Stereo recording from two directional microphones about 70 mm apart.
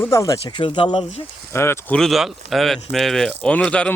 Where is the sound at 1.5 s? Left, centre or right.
Left.